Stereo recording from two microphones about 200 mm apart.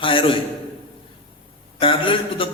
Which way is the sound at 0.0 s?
25° left (ahead or behind).